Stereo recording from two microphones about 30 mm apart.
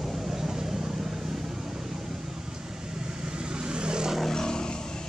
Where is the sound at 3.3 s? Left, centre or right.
Right.